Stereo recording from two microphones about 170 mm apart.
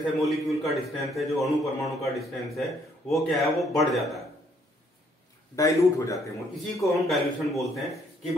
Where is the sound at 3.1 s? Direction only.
Centre (ahead or behind).